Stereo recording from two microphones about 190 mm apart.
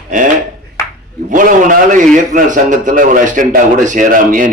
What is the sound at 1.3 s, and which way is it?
A man's voice, 45° right (ahead or behind).